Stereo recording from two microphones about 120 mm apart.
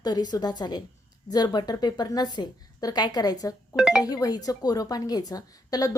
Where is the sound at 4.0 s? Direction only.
30° left (ahead or behind).